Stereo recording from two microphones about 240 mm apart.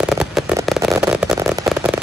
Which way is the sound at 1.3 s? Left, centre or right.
Centre.